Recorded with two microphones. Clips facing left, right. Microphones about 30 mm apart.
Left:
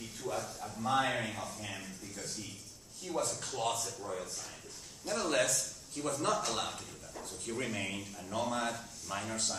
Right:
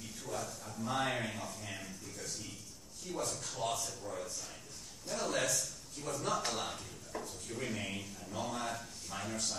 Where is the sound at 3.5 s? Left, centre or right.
Left.